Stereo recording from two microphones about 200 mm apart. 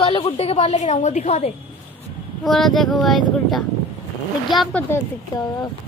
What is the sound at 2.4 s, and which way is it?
Speech, centre (ahead or behind).